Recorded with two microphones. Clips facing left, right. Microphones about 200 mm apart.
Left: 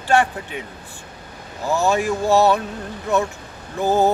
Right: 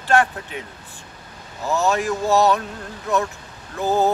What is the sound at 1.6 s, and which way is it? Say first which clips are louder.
Music: left 1 dB; 15° left (ahead or behind).